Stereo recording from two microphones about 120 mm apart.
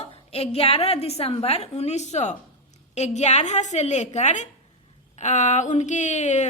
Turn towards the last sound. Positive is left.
turn(degrees=80)